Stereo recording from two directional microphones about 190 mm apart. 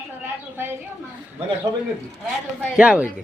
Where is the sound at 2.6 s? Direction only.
5° right (ahead or behind).